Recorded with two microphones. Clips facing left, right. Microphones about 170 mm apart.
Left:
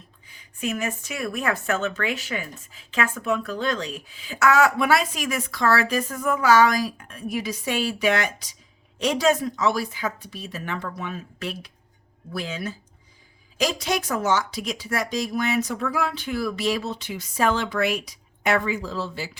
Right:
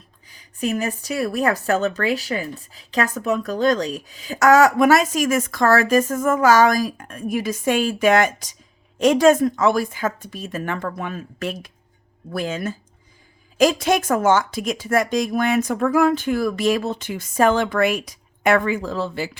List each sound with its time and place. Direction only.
0.3 s speech: 35° right (ahead or behind); by 19.4 s 55° right (ahead or behind)